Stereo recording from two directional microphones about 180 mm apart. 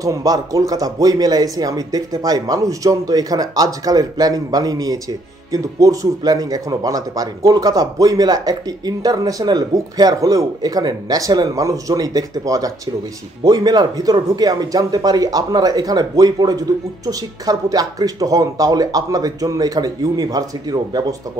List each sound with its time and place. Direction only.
0.0 s speech: 20° right (ahead or behind)